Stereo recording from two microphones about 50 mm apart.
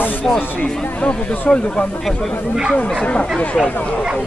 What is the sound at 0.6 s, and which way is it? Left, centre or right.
Speech, left.